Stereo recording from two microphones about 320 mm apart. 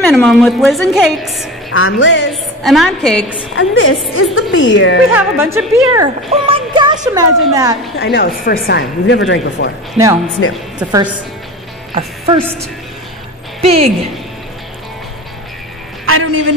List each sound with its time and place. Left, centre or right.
0.1 s a woman's voice: centre
1.7 s speech: left
2.6 s a woman's voice: centre
3.5 s speech: left
5.1 s speech: centre
8.0 s speech: left
10.8 s speech: centre
13.6 s speech: centre
16.1 s a woman's voice: right